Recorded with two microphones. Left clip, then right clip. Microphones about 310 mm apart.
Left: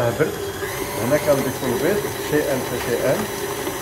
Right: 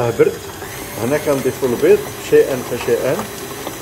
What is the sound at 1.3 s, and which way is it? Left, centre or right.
Speech, right.